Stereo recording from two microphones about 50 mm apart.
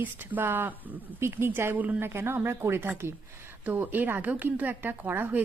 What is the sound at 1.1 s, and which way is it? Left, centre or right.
A woman's voice, right.